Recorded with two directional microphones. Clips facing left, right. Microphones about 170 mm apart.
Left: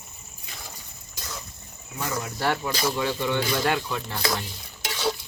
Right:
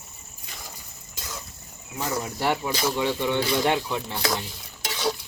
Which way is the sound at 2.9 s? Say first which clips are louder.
Right 1 dB; 20° right (ahead or behind).